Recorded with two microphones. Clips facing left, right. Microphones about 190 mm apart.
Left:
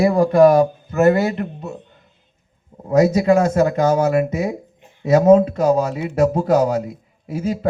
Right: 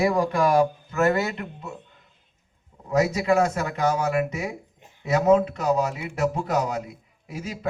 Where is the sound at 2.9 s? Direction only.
35° left (ahead or behind).